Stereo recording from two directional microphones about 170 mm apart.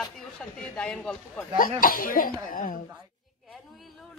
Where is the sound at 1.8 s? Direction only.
55° left (ahead or behind).